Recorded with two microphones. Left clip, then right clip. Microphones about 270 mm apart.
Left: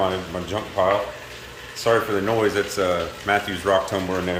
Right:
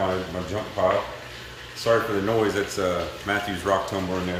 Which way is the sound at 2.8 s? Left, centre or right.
Centre.